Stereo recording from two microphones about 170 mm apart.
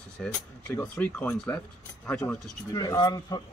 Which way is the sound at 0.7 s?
10° left (ahead or behind).